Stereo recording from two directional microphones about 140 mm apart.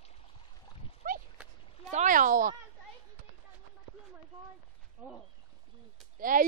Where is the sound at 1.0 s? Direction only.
90° right.